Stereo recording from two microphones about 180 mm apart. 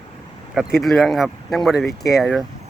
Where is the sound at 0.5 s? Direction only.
Centre (ahead or behind).